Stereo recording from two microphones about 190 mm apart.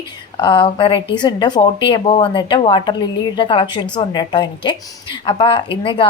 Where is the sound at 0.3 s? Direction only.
25° left (ahead or behind).